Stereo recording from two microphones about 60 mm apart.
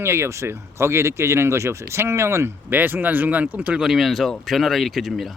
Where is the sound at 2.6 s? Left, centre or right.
Right.